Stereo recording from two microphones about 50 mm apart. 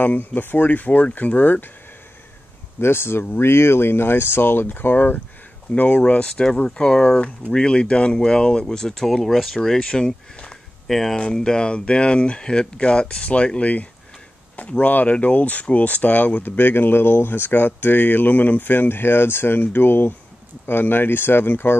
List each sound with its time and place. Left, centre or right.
0.0 s speech: left
2.8 s speech: left; by 10.6 s centre
10.9 s speech: centre; by 16.4 s left
16.4 s speech: left